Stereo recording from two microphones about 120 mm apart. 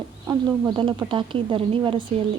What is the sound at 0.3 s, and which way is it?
Speech, 30° right (ahead or behind).